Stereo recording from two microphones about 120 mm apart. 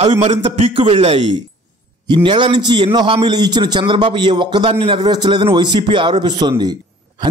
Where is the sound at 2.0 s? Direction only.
40° right (ahead or behind).